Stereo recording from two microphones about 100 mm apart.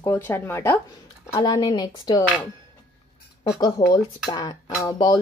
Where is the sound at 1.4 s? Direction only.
50° left (ahead or behind).